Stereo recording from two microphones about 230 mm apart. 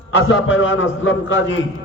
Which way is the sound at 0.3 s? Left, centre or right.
Left.